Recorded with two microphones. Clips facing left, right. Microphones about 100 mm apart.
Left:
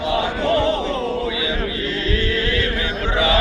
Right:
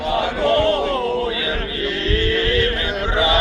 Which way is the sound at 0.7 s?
60° right (ahead or behind).